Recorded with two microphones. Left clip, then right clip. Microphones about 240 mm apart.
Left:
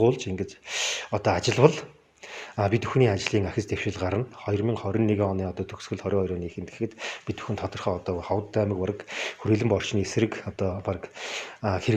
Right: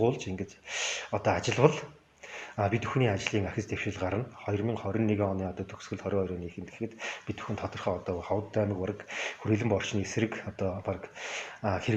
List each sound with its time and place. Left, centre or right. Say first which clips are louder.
0.0 s speech: left 6 dB; left